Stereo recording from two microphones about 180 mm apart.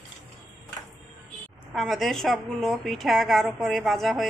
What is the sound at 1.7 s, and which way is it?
A woman's voice, centre (ahead or behind).